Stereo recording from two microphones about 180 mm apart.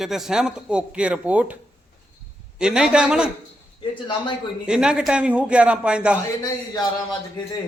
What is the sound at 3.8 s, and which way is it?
Speech, 25° left (ahead or behind).